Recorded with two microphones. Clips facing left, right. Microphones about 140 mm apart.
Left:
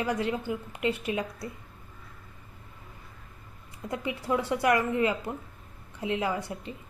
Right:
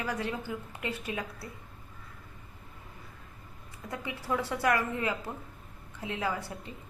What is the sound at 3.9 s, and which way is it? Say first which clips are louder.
A woman's voice: left 4 dB; 20° left (ahead or behind).